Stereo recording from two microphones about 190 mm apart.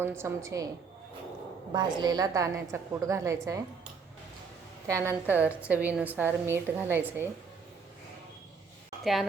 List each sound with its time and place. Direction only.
0.2 s a woman's voice: 15° right (ahead or behind)
1.7 s a woman's voice: 20° right (ahead or behind)
4.9 s a woman's voice: 15° right (ahead or behind)